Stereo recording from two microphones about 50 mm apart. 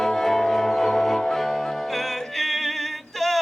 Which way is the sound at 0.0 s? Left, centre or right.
Centre.